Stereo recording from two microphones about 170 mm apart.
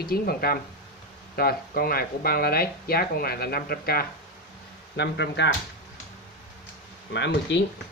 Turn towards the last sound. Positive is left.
turn(degrees=85)